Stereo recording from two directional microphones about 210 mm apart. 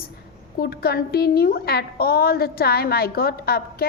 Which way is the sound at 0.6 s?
45° left (ahead or behind).